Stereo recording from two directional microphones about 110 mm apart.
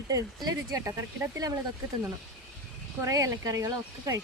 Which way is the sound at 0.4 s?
30° right (ahead or behind).